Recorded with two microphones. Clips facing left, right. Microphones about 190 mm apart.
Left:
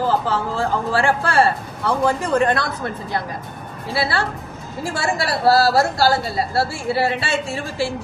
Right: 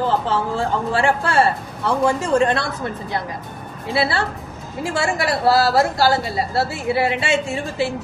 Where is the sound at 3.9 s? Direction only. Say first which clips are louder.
Right 1 dB; 20° right (ahead or behind).